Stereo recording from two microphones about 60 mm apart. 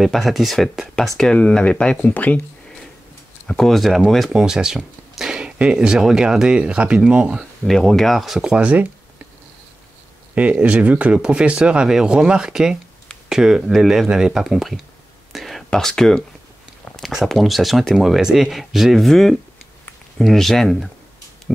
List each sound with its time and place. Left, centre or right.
0.0 s speech: centre; by 2.4 s left
3.4 s speech: centre
7.6 s speech: centre
8.5 s speech: right
10.3 s speech: right; by 14.8 s centre
15.3 s whispering: centre
15.9 s speech: centre